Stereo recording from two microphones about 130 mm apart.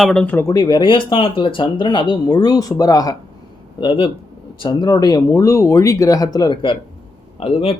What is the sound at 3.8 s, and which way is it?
Speech, 45° left (ahead or behind).